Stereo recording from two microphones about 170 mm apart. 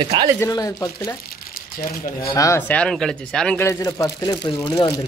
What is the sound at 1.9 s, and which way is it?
Speech, 65° left (ahead or behind).